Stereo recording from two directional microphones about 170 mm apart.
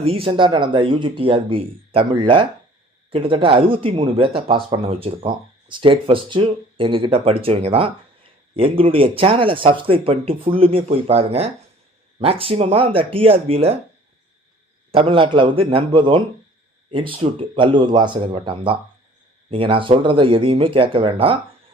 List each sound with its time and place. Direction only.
0.0 s speech: 35° right (ahead or behind)
14.9 s speech: 30° right (ahead or behind)